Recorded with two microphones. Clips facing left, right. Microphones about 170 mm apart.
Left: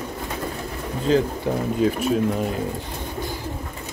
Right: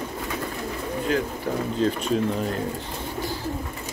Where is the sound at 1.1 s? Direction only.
30° left (ahead or behind).